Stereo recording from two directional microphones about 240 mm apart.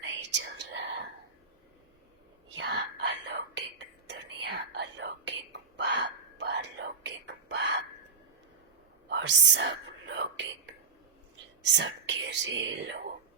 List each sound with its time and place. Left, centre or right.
0.0 s whispering: right
2.6 s whispering: right
9.0 s whispering: right
11.6 s whispering: right